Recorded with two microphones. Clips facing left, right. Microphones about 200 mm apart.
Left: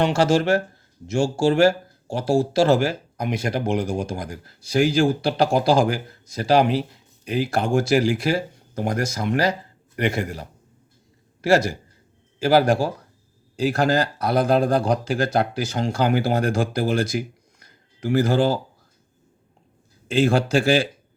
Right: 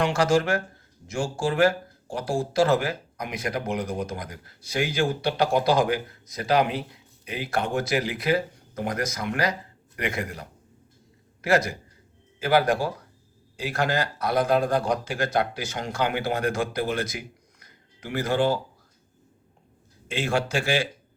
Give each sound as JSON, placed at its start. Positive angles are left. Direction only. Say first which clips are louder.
{"t": 0.0, "sound": "speech", "louder": "left 3 dB", "side_deg": 25}
{"t": 11.4, "sound": "speech", "louder": "left 4 dB", "side_deg": 30}
{"t": 20.1, "sound": "speech", "louder": "left 7 dB", "side_deg": 35}